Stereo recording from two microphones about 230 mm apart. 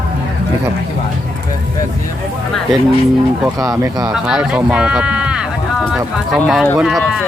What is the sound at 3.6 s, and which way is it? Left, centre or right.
Speech, centre.